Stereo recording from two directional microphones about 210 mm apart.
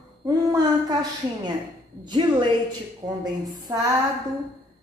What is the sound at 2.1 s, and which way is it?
Speech, 25° right (ahead or behind).